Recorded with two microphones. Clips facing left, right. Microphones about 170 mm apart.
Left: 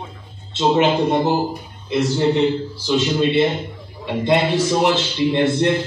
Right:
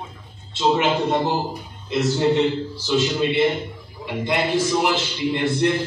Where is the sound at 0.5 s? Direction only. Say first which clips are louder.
Left 3 dB; 30° left (ahead or behind).